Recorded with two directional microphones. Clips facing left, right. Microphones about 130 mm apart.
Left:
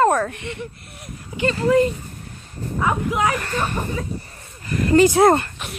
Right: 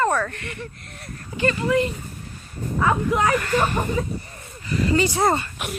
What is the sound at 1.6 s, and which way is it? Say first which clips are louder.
Speech: left 6 dB; 35° left (ahead or behind).